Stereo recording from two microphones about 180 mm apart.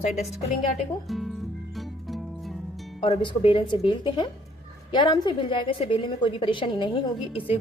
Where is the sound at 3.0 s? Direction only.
30° left (ahead or behind).